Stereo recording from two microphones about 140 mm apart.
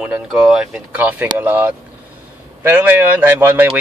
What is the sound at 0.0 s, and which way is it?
Speech, 5° right (ahead or behind).